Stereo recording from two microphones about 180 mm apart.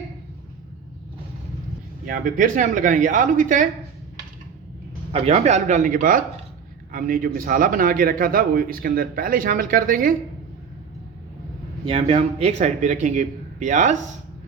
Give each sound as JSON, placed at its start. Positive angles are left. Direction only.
{"t": 2.0, "sound": "speech", "side_deg": -45}
{"t": 5.1, "sound": "a man's voice", "side_deg": -35}
{"t": 11.9, "sound": "a man's voice", "side_deg": -35}